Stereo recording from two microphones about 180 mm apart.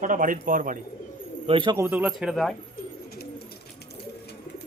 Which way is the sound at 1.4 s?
25° right (ahead or behind).